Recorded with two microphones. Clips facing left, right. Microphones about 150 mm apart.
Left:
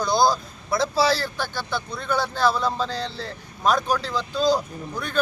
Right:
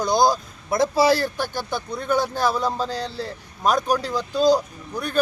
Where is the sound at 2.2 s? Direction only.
15° right (ahead or behind).